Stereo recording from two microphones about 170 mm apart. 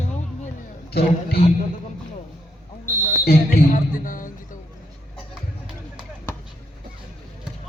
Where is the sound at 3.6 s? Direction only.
50° left (ahead or behind).